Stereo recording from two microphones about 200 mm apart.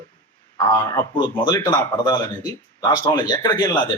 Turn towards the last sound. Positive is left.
turn(degrees=20)  # may be behind; listen again after turning